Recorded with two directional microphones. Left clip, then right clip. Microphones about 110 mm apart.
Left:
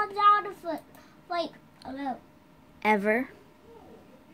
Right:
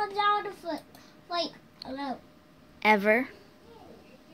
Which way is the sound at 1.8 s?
15° left (ahead or behind).